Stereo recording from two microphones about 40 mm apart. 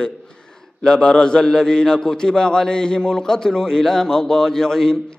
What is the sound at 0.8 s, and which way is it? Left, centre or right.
A man's voice, centre.